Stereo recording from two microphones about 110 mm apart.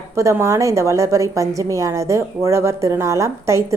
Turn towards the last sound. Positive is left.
turn(degrees=-25)  # may be behind; listen again after turning